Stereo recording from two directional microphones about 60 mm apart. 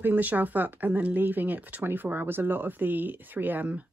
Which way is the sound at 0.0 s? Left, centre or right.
Right.